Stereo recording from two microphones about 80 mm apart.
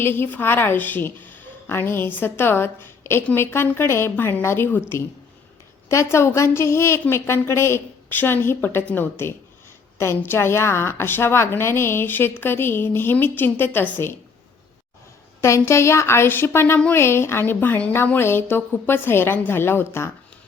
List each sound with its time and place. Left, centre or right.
0.0 s a woman's voice: left
15.4 s a woman's voice: left